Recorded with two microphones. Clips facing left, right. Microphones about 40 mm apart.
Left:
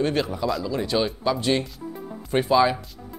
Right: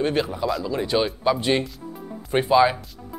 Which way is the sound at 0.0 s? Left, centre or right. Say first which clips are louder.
Right 1 dB; centre.